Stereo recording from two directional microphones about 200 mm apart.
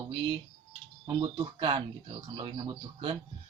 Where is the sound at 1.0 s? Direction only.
25° right (ahead or behind).